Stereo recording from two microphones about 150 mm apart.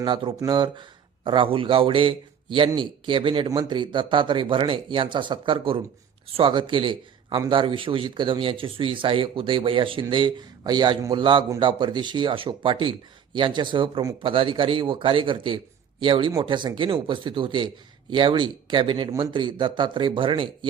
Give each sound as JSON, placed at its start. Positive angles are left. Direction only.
{"t": 0.0, "sound": "a man's voice", "side_deg": -35}